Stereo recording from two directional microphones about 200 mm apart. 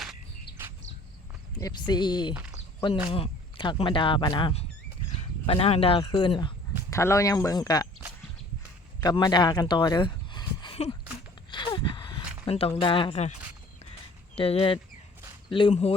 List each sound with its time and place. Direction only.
1.5 s speech: 20° left (ahead or behind)
9.0 s speech: 20° left (ahead or behind)
11.5 s a sound: 25° left (ahead or behind)
14.3 s speech: 30° left (ahead or behind)